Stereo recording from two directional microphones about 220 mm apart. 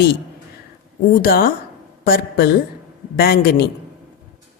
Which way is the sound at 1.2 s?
40° left (ahead or behind).